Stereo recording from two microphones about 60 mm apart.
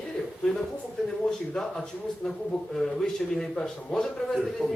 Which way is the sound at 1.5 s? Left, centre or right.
Centre.